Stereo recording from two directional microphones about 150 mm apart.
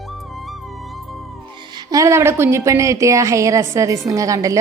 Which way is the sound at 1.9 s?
20° right (ahead or behind).